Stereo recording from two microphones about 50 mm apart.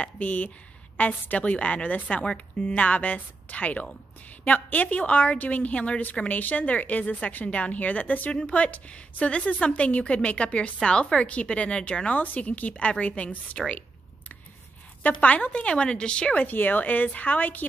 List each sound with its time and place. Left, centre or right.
0.0 s a woman's voice: left
8.3 s a woman's voice: left
15.0 s a woman's voice: left
16.4 s speech: left